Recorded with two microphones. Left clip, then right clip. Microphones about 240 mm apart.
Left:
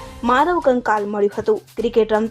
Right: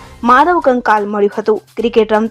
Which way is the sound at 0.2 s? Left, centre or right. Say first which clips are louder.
Right 7 dB; centre.